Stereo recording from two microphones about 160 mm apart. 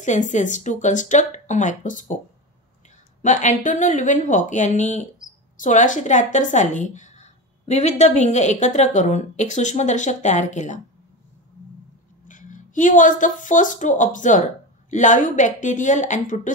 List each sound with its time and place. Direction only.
0.0 s a woman's voice: 50° left (ahead or behind)
3.2 s a woman's voice: 50° left (ahead or behind)
12.3 s a woman's voice: 55° left (ahead or behind)